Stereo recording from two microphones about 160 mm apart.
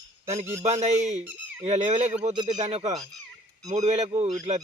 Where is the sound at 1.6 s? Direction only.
45° right (ahead or behind).